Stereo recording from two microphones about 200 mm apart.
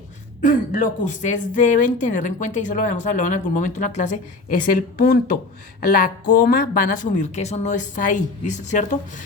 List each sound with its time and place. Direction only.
0.4 s a woman's voice: 40° left (ahead or behind)
6.5 s speech: 45° left (ahead or behind)